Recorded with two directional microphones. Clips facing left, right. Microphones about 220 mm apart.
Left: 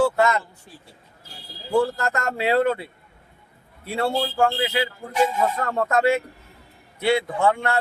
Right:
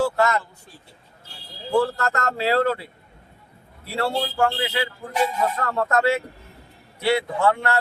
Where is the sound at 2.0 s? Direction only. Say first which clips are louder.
Even; 20° left (ahead or behind).